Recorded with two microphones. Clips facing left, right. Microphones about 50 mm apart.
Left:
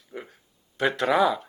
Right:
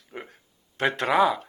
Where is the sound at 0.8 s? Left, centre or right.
Right.